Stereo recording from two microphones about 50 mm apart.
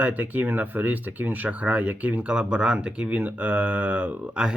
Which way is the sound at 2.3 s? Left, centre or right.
Right.